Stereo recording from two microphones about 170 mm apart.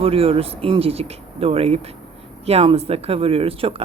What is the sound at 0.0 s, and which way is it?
Speech, 35° right (ahead or behind).